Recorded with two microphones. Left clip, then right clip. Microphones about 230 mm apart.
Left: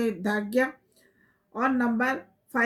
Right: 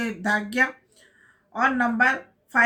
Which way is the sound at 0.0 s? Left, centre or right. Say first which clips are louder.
Right 3 dB; centre.